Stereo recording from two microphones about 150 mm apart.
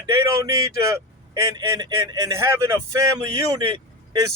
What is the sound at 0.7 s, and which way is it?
Speech, 20° right (ahead or behind).